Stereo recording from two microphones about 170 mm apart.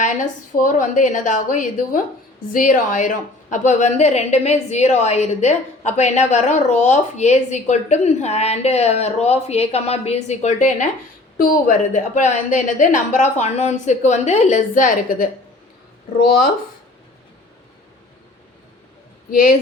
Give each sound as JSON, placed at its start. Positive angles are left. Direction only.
{"t": 0.0, "sound": "a woman's voice", "side_deg": 50}